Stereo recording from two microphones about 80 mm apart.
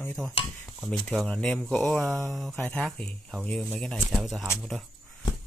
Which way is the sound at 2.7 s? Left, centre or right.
Centre.